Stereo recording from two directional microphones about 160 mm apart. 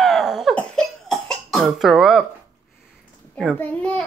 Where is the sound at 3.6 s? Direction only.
10° left (ahead or behind).